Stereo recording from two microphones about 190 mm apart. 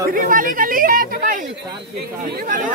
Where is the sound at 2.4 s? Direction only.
45° right (ahead or behind).